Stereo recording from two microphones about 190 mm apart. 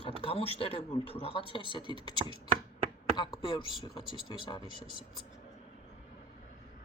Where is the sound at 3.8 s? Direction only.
25° left (ahead or behind).